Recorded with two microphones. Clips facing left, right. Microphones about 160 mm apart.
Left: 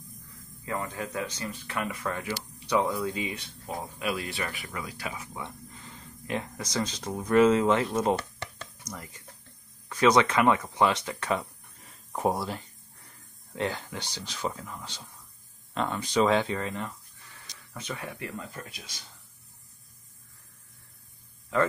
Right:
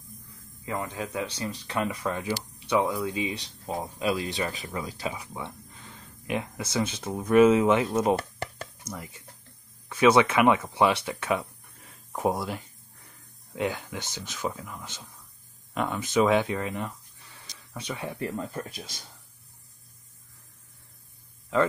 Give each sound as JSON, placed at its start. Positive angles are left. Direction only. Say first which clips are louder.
{"t": 0.3, "sound": "a sound", "louder": "right 1 dB", "side_deg": -15}
{"t": 1.3, "sound": "speech", "louder": "right 3 dB", "side_deg": -25}
{"t": 5.9, "sound": "a sound", "louder": "right 2 dB", "side_deg": -15}
{"t": 6.7, "sound": "speech", "louder": "right 2 dB", "side_deg": -10}
{"t": 13.6, "sound": "speech", "louder": "right 2 dB", "side_deg": -10}
{"t": 18.0, "sound": "speech", "louder": "right 5 dB", "side_deg": -30}